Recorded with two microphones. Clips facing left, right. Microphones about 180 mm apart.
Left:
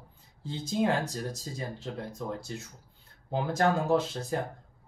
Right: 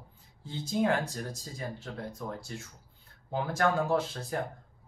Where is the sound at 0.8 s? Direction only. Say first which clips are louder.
Even; 25° left (ahead or behind).